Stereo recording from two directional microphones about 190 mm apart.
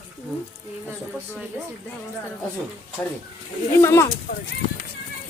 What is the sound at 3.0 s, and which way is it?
Speech, 10° left (ahead or behind).